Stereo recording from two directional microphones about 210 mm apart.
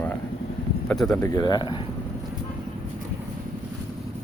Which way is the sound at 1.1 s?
15° left (ahead or behind).